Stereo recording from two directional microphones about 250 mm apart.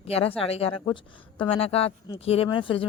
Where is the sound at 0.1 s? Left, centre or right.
Left.